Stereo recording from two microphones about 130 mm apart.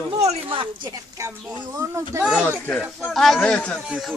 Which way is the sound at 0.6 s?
40° right (ahead or behind).